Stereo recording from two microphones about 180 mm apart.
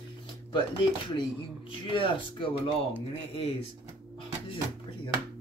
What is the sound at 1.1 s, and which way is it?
Speech, 30° left (ahead or behind).